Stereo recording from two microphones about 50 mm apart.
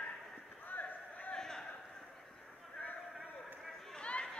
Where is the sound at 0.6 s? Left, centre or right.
Left.